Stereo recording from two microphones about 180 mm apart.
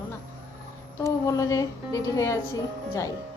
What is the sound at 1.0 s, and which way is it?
A woman's voice, 20° left (ahead or behind).